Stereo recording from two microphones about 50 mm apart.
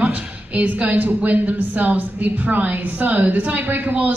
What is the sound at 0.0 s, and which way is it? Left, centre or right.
Speech, right.